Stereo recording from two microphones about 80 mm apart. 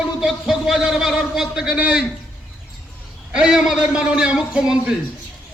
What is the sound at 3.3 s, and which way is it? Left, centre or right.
A man's voice, centre.